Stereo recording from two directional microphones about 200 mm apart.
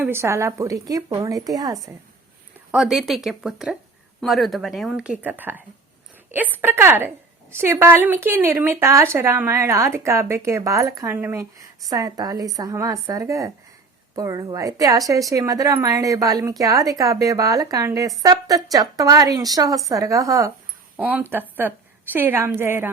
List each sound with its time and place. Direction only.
0.0 s a woman's voice: 15° right (ahead or behind)
2.7 s a woman's voice: centre (ahead or behind)